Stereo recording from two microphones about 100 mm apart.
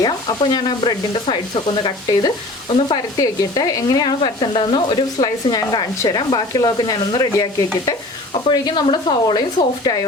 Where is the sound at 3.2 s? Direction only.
35° left (ahead or behind).